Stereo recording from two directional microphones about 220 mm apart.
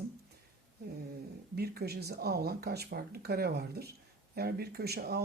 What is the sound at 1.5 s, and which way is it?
Speech, 45° right (ahead or behind).